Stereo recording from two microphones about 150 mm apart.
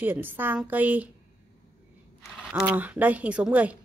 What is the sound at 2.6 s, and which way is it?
A woman's voice, 10° right (ahead or behind).